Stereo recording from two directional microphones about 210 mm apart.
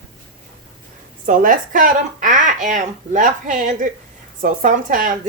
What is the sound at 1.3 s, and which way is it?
Speech, 40° right (ahead or behind).